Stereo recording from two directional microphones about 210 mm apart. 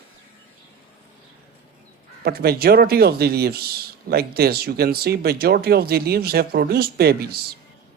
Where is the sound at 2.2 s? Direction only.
50° right (ahead or behind).